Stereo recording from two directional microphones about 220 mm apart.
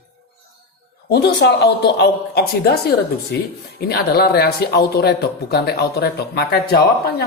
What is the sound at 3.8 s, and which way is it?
Speech, 45° left (ahead or behind).